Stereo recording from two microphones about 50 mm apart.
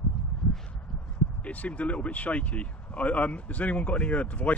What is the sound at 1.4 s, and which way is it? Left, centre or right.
Speech, left.